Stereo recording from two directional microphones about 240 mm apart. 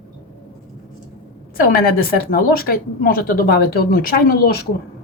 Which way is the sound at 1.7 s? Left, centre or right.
Left.